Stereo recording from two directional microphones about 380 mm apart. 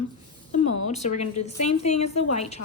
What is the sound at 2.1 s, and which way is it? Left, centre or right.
Speech, left.